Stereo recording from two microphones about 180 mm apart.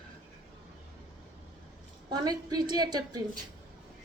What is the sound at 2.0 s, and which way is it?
A woman's voice, 20° right (ahead or behind).